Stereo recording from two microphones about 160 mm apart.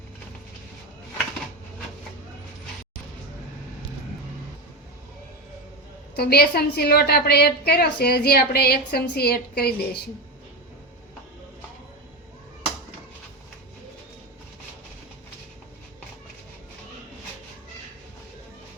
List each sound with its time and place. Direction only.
6.1 s a woman's voice: 75° left (ahead or behind)